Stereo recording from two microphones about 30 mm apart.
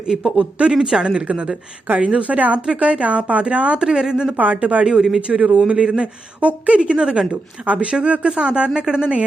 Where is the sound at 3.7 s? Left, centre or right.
Right.